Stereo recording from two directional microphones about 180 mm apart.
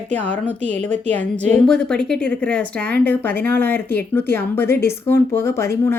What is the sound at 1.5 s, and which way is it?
A woman's voice, 5° left (ahead or behind).